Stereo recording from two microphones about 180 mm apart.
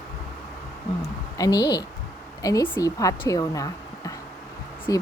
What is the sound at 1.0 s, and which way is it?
Speech, 20° left (ahead or behind).